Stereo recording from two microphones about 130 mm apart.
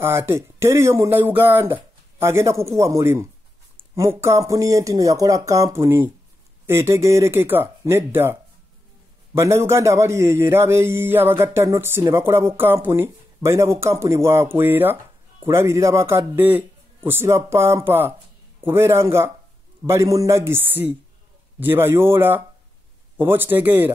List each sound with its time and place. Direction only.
0.0 s a man's voice: 20° right (ahead or behind)